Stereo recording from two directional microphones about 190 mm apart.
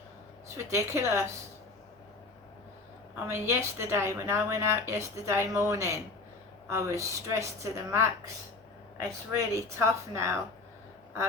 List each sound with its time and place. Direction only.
0.5 s a woman's voice: 15° right (ahead or behind)
3.2 s a woman's voice: 15° right (ahead or behind)